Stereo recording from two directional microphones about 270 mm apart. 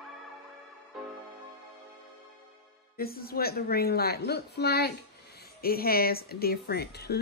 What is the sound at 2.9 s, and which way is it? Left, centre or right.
Speech, left.